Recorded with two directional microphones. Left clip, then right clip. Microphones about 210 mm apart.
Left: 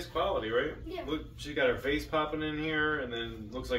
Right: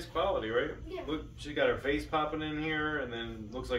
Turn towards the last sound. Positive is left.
turn(degrees=-5)  # may be behind; listen again after turning